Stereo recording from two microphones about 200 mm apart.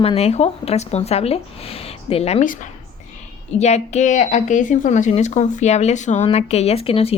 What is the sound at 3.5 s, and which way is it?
Speech, 35° left (ahead or behind).